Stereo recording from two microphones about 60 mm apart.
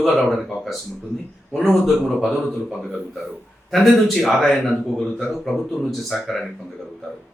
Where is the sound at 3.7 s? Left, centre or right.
Centre.